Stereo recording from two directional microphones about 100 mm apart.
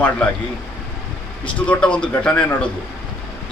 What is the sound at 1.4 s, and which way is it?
Speech, 15° left (ahead or behind).